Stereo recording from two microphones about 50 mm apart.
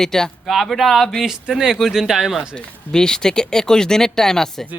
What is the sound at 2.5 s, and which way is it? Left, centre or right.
Speech, centre.